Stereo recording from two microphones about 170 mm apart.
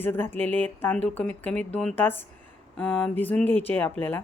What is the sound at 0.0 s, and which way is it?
A woman's voice, 10° left (ahead or behind).